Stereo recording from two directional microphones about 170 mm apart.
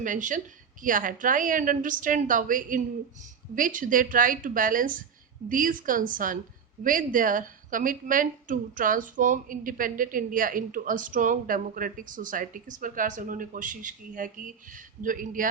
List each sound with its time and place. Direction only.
0.0 s a woman's voice: 50° right (ahead or behind)